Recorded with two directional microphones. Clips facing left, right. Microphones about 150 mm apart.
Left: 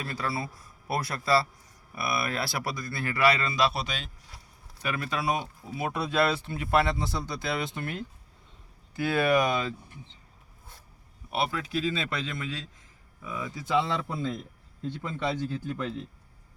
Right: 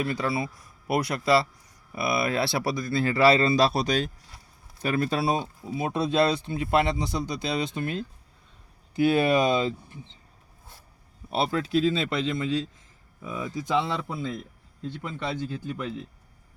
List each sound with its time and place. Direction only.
0.0 s speech: 20° right (ahead or behind)
5.7 s speech: 20° right (ahead or behind)
11.3 s speech: 30° right (ahead or behind)
15.3 s speech: 15° right (ahead or behind)